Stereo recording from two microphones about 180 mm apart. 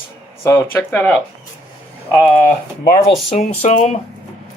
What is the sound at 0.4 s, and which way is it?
Speech, 15° left (ahead or behind).